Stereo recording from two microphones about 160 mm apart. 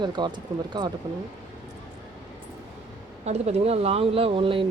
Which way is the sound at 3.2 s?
40° right (ahead or behind).